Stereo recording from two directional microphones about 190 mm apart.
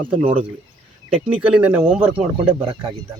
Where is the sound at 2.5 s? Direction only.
30° right (ahead or behind).